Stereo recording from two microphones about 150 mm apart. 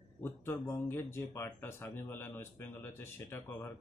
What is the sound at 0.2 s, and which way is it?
Speech, 20° left (ahead or behind).